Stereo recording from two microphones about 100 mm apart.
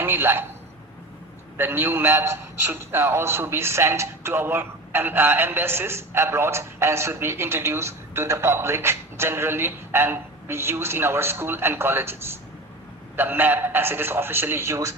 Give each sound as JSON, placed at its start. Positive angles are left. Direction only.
{"t": 0.0, "sound": "a man's voice", "side_deg": -25}
{"t": 1.5, "sound": "a man's voice", "side_deg": -20}